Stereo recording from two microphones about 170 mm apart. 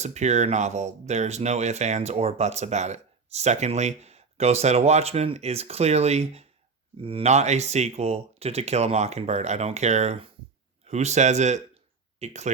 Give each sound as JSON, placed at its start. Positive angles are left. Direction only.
{"t": 0.0, "sound": "speech", "side_deg": -40}